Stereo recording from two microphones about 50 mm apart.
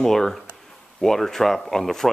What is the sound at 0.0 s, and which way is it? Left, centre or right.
Speech, centre.